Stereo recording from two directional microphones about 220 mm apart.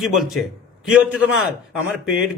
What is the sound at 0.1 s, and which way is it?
A man's voice, centre (ahead or behind).